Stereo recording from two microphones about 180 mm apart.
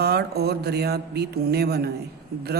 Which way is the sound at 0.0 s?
60° right (ahead or behind).